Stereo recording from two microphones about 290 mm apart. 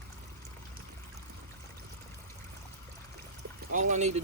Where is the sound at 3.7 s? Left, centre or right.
Right.